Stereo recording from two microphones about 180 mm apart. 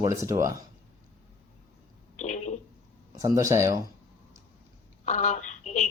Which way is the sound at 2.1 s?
40° left (ahead or behind).